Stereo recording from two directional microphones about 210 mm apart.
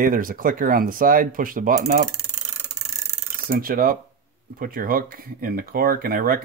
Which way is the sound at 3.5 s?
45° right (ahead or behind).